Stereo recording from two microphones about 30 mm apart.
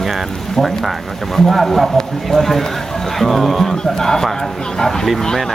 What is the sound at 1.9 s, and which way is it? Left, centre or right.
Speech, centre.